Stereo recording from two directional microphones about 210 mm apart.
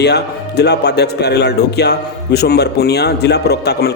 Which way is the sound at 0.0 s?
50° left (ahead or behind).